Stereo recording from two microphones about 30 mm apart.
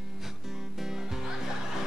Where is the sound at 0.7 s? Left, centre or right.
Centre.